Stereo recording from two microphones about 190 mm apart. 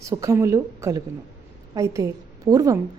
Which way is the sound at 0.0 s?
15° right (ahead or behind).